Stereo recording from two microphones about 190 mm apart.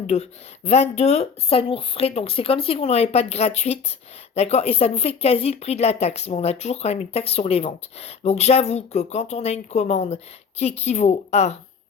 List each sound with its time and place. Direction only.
0.1 s speech: 35° left (ahead or behind)